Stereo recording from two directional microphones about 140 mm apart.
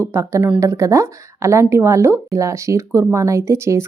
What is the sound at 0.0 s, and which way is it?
Speech, 20° right (ahead or behind).